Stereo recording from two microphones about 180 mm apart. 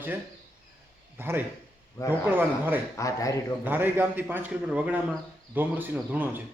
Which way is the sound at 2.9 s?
15° left (ahead or behind).